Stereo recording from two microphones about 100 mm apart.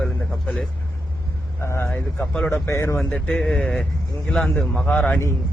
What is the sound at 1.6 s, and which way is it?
Speech, 25° left (ahead or behind).